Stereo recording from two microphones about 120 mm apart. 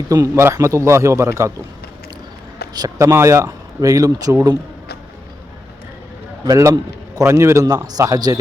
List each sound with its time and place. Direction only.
0.1 s speech: 25° right (ahead or behind)
2.7 s speech: 30° right (ahead or behind)
6.4 s speech: 30° right (ahead or behind)